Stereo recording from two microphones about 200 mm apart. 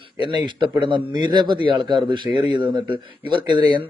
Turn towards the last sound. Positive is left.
turn(degrees=-20)  # may be behind; listen again after turning